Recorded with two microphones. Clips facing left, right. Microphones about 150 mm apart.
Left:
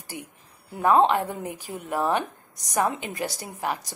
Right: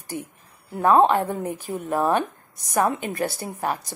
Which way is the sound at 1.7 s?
45° right (ahead or behind).